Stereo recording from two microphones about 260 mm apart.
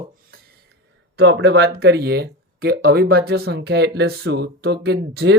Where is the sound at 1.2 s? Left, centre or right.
Right.